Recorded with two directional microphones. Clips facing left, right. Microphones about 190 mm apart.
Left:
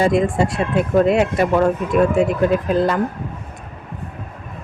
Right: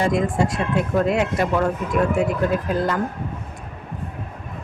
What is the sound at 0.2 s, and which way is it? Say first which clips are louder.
Speech: left 3 dB; 25° left (ahead or behind).